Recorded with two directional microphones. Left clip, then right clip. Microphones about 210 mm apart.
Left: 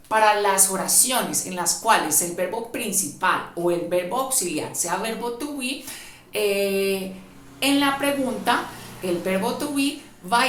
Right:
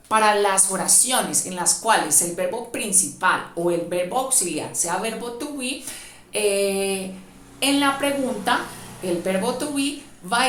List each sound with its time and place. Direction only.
0.1 s a woman's voice: 40° right (ahead or behind)
0.5 s a woman's voice: 20° right (ahead or behind)